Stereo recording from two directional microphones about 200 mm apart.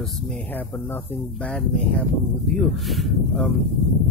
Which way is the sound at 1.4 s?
5° left (ahead or behind).